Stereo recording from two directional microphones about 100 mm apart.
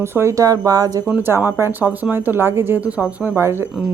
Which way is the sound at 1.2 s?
25° right (ahead or behind).